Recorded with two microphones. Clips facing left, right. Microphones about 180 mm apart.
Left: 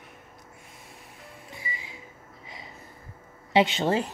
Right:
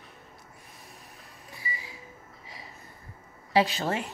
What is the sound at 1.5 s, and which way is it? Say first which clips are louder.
Microwave oven: even; 25° left (ahead or behind).